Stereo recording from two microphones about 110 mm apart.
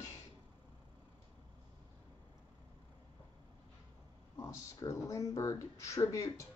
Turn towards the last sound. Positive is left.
turn(degrees=30)  # may be behind; listen again after turning